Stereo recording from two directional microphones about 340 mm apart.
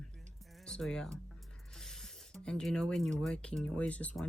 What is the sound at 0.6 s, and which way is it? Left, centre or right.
Speech, centre.